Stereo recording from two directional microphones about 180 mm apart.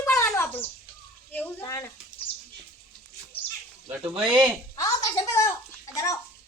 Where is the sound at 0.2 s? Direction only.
15° left (ahead or behind).